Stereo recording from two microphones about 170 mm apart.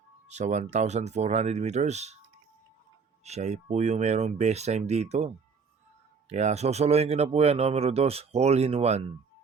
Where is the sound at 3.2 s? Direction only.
40° right (ahead or behind).